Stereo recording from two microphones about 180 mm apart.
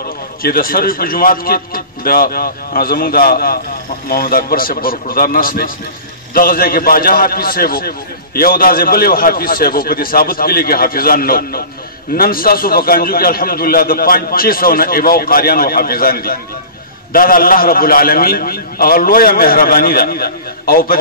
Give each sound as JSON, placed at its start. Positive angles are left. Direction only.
{"t": 0.4, "sound": "a man's voice", "side_deg": 55}